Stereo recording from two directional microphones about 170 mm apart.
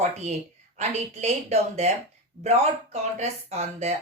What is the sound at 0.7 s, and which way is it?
Speech, 40° right (ahead or behind).